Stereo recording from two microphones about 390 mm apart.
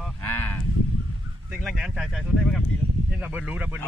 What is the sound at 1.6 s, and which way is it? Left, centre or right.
Speech, centre.